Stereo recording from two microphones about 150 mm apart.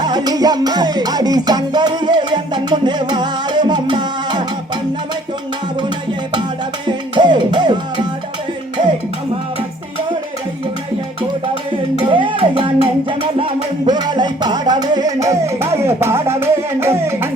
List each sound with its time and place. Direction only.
0.0 s music: 25° right (ahead or behind)
6.8 s music: 30° right (ahead or behind)
11.9 s music: 35° right (ahead or behind); by 17.2 s 15° right (ahead or behind)